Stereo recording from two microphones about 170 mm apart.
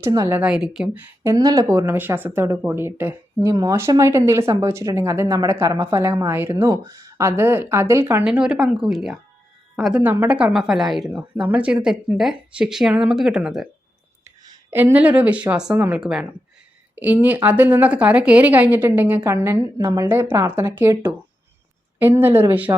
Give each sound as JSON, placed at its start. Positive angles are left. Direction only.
{"t": 0.0, "sound": "speech", "side_deg": -20}
{"t": 0.4, "sound": "a woman's voice", "side_deg": -5}
{"t": 1.2, "sound": "speech", "side_deg": -20}
{"t": 8.2, "sound": "a woman's voice", "side_deg": -5}
{"t": 14.3, "sound": "speech", "side_deg": -15}